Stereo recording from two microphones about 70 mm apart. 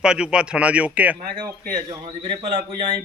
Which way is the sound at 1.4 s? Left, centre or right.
Right.